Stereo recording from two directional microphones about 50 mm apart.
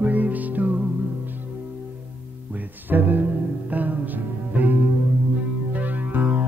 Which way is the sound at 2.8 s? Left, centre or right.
Right.